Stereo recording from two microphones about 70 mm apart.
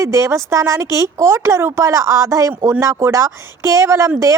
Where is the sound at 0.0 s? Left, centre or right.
Right.